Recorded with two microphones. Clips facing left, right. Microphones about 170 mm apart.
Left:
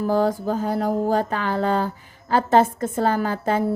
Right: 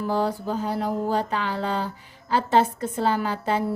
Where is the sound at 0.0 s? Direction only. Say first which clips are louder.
Left 4 dB; 45° left (ahead or behind).